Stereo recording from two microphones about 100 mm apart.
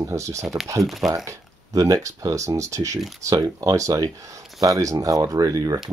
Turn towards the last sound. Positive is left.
turn(degrees=-35)  # may be behind; listen again after turning